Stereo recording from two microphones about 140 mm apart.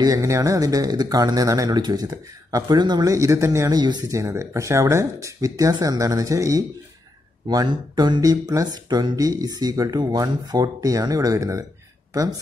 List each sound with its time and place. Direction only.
0.0 s speech: 25° right (ahead or behind)